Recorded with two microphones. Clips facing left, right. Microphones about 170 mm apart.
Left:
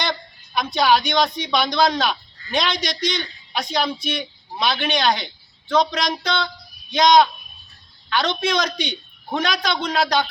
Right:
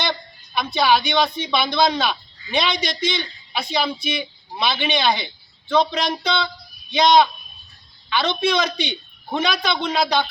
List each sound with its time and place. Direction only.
0.0 s a man's voice: 5° right (ahead or behind)
8.1 s a man's voice: centre (ahead or behind)